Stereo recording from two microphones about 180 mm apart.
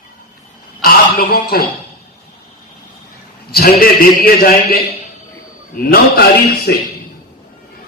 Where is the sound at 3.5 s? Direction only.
55° left (ahead or behind).